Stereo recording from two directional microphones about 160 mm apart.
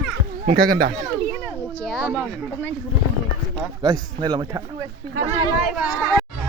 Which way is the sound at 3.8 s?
25° right (ahead or behind).